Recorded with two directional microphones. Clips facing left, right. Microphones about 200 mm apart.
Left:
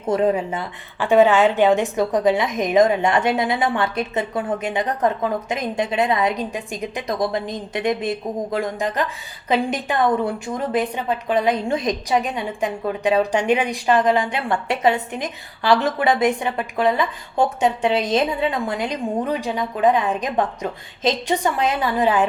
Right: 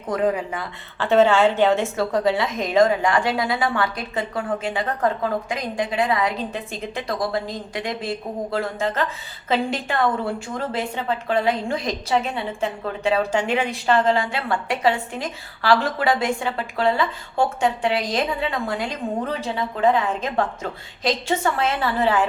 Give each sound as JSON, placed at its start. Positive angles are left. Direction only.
{"t": 0.1, "sound": "a woman's voice", "side_deg": 25}